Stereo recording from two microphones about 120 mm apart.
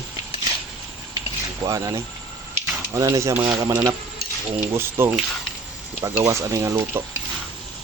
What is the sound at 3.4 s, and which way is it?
Speech, 30° right (ahead or behind).